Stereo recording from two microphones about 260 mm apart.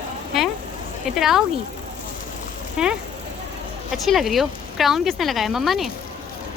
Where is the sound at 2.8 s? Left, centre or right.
Centre.